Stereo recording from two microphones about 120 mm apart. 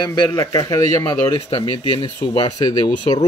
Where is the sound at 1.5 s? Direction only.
50° left (ahead or behind).